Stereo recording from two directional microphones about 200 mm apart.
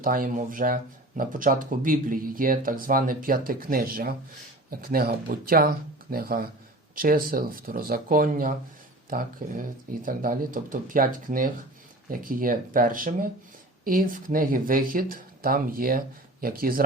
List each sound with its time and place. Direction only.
0.0 s speech: 45° right (ahead or behind)